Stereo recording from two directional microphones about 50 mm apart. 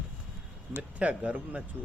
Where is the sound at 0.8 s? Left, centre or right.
Right.